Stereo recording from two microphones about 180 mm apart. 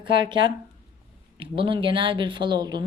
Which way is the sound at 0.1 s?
25° right (ahead or behind).